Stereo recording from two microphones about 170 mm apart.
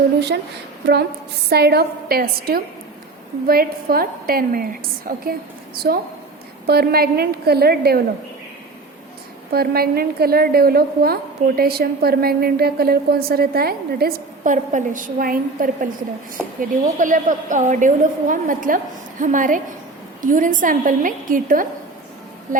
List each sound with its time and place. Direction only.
1.5 s a woman's voice: 70° right (ahead or behind)
9.5 s a woman's voice: 65° right (ahead or behind)